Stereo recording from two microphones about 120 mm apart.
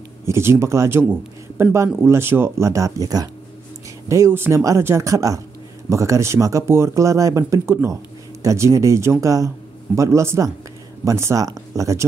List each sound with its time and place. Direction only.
0.2 s speech: 20° right (ahead or behind)